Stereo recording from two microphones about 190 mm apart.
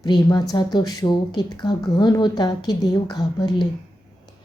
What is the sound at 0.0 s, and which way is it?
Speech, 20° left (ahead or behind).